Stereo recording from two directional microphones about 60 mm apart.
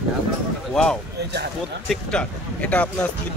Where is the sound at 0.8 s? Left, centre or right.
Centre.